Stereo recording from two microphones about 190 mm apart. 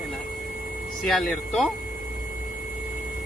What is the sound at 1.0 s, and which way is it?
Speech, centre (ahead or behind).